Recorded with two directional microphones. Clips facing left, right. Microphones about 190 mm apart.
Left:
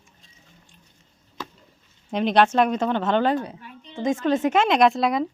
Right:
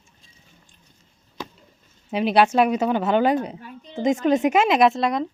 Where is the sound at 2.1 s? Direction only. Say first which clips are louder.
Right 1 dB; 5° right (ahead or behind).